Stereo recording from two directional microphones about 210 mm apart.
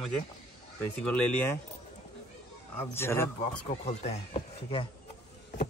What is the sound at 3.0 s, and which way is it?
Speech, 10° left (ahead or behind).